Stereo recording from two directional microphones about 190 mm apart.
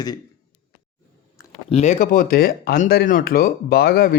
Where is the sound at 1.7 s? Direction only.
35° left (ahead or behind).